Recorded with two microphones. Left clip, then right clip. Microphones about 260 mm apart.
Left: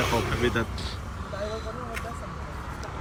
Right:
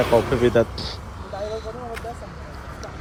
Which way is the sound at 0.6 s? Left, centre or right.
Centre.